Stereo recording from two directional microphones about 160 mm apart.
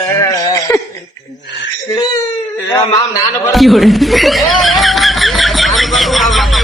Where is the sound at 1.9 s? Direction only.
25° left (ahead or behind).